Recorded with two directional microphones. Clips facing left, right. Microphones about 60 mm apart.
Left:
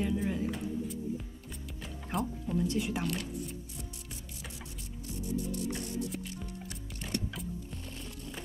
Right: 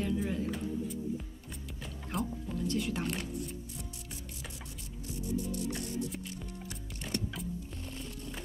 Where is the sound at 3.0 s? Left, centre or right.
Right.